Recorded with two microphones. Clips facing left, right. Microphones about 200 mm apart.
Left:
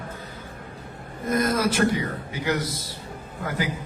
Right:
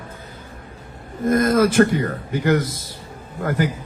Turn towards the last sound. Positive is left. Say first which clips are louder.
# right 6 dB
turn(degrees=-50)  # may be behind; listen again after turning